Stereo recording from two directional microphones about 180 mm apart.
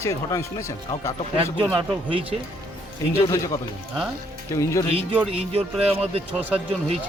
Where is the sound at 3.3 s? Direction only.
20° left (ahead or behind).